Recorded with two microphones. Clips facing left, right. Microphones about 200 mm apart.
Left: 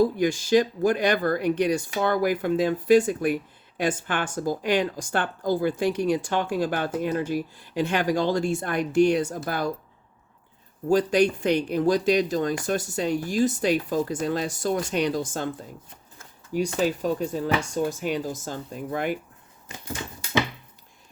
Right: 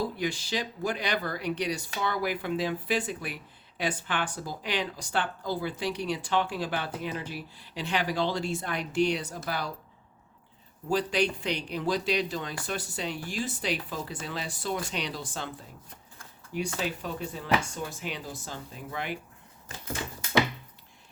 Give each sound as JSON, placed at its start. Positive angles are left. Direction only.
{"t": 0.0, "sound": "speech", "side_deg": 45}
{"t": 10.8, "sound": "speech", "side_deg": 45}
{"t": 16.8, "sound": "speech", "side_deg": 40}